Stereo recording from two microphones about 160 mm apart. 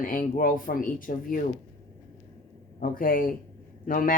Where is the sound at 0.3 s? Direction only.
60° left (ahead or behind).